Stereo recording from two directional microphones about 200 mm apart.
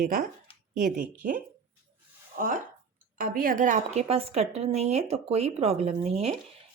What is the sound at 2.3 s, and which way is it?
A woman's voice, 40° right (ahead or behind).